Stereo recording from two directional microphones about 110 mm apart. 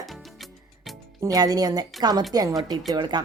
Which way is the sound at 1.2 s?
35° right (ahead or behind).